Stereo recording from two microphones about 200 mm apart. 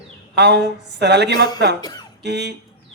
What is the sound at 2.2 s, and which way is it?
Speech, 60° right (ahead or behind).